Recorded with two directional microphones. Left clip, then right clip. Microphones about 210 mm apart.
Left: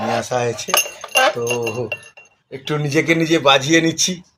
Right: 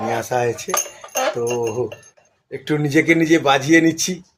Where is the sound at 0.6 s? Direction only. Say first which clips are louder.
Left 5 dB; 30° left (ahead or behind).